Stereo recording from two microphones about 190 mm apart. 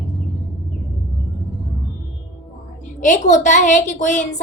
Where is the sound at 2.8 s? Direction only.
40° left (ahead or behind).